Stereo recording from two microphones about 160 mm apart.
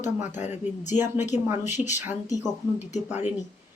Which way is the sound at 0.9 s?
15° right (ahead or behind).